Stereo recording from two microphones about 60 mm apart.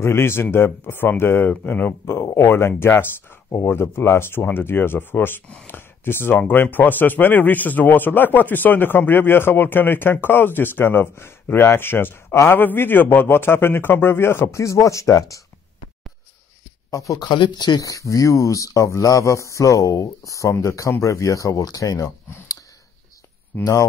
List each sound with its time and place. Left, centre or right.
0.0 s speech: left
1.5 s speech: left
2.3 s speech: left
14.6 s speech: left
16.9 s speech: left
23.6 s speech: left